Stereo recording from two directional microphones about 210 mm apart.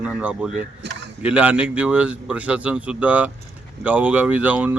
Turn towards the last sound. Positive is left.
turn(degrees=-5)  # may be behind; listen again after turning